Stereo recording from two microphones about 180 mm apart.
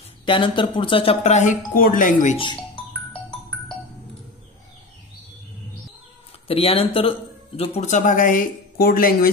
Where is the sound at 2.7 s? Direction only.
5° left (ahead or behind).